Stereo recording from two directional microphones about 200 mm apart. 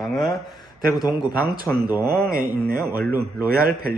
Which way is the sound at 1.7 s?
5° left (ahead or behind).